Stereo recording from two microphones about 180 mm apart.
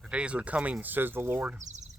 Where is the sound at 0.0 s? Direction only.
5° right (ahead or behind).